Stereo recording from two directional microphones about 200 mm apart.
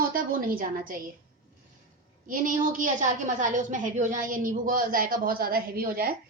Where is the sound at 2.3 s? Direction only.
40° right (ahead or behind).